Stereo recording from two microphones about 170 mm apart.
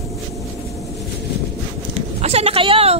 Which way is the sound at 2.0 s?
35° right (ahead or behind).